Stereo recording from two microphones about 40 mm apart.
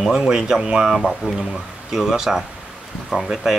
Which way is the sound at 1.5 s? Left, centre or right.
Centre.